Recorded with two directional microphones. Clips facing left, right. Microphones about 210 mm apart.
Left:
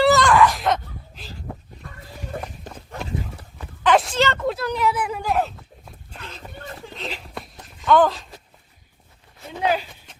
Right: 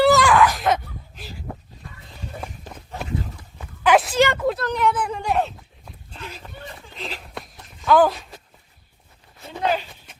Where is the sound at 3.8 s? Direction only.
5° right (ahead or behind).